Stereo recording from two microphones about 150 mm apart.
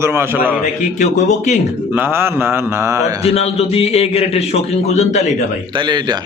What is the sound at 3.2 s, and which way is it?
A man's voice, 45° left (ahead or behind).